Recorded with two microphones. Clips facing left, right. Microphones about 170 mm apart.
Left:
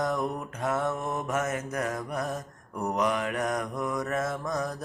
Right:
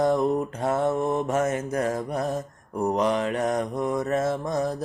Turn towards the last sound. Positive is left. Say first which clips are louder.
# right 5 dB
turn(degrees=-25)  # may be behind; listen again after turning